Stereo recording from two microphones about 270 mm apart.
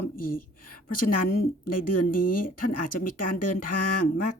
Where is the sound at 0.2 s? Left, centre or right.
Left.